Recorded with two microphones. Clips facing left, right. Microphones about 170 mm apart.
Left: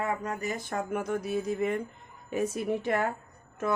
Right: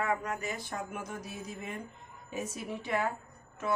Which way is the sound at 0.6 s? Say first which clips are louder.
Left 8 dB; 55° left (ahead or behind).